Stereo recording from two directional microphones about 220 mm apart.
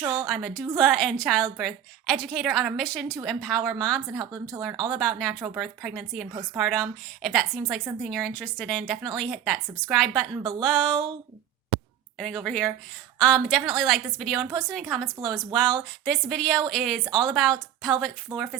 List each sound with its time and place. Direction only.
0.0 s a sound: 20° right (ahead or behind)
0.3 s a woman's voice: centre (ahead or behind)
12.1 s a woman's voice: centre (ahead or behind)
18.3 s speech: 20° right (ahead or behind)